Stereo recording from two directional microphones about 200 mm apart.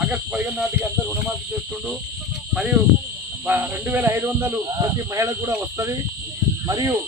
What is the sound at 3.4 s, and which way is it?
Speech, 10° right (ahead or behind).